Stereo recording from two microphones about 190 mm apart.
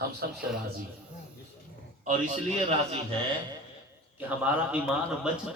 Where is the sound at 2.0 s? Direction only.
35° right (ahead or behind).